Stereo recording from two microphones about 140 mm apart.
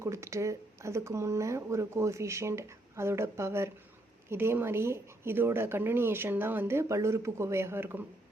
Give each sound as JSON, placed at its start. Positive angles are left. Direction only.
{"t": 0.0, "sound": "a woman's voice", "side_deg": -20}